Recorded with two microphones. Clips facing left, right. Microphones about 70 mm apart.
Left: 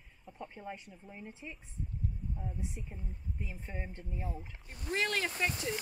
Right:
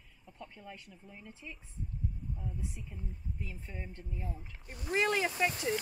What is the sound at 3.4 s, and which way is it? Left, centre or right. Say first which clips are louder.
Speech: left 4 dB; left.